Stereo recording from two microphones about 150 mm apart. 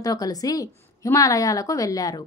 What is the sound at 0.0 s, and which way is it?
A woman's voice, 25° left (ahead or behind).